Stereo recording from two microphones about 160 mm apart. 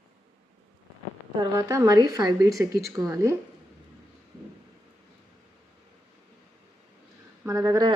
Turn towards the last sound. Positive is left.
turn(degrees=-25)  # may be behind; listen again after turning